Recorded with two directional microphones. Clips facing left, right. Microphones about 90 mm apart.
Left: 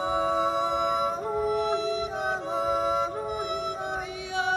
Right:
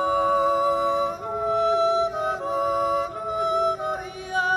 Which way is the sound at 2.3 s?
30° left (ahead or behind).